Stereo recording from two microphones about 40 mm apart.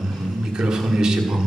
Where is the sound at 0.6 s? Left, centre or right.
Centre.